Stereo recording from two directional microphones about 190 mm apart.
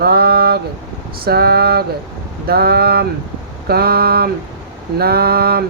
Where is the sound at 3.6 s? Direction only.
55° right (ahead or behind).